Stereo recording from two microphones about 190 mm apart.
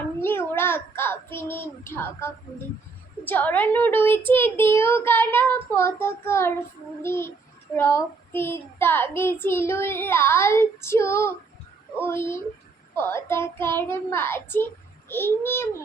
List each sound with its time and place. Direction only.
0.2 s a child's voice: 10° left (ahead or behind)
3.2 s child singing: 10° left (ahead or behind)